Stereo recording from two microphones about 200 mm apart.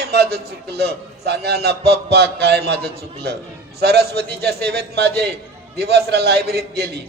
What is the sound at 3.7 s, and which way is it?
A man's voice, 55° right (ahead or behind).